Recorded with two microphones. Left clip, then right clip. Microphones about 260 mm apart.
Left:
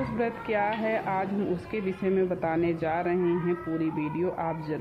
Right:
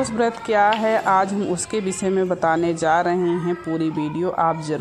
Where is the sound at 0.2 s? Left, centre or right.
Centre.